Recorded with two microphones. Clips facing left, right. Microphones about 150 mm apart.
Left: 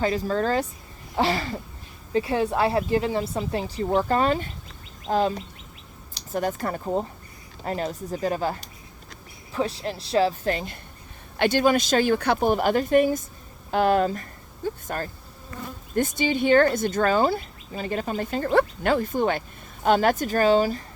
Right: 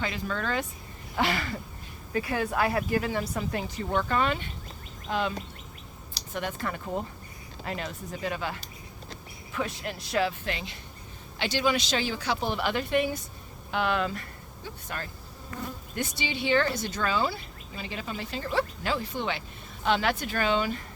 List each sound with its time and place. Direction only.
0.0 s a woman's voice: 40° left (ahead or behind)
6.3 s a woman's voice: 40° left (ahead or behind)